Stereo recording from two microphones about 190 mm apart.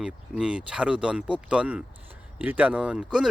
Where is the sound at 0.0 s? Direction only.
5° right (ahead or behind).